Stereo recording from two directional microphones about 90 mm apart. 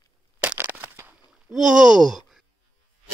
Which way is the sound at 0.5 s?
20° right (ahead or behind).